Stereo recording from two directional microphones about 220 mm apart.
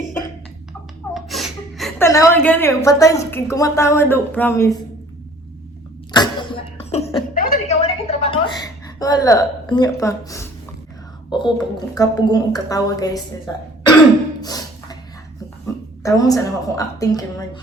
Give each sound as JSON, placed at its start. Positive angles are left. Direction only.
{"t": 1.1, "sound": "gasp", "side_deg": 0}
{"t": 2.0, "sound": "a woman's voice", "side_deg": 10}
{"t": 6.1, "sound": "cough", "side_deg": 20}
{"t": 7.3, "sound": "a woman's voice", "side_deg": 35}
{"t": 14.4, "sound": "a sound", "side_deg": 15}
{"t": 15.6, "sound": "a woman's voice", "side_deg": 15}